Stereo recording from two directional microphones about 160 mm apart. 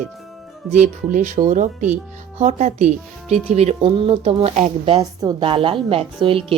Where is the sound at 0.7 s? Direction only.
50° right (ahead or behind).